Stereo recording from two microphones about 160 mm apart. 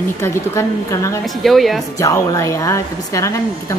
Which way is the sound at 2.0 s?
20° left (ahead or behind).